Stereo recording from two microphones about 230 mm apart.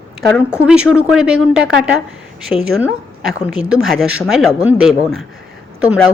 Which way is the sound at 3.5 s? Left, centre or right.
Centre.